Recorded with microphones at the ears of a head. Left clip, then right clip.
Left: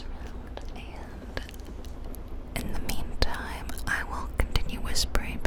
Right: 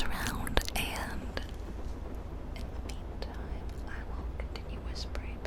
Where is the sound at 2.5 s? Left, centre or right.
Left.